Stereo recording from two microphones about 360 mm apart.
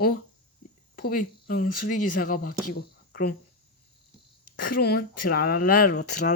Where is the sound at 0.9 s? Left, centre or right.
Left.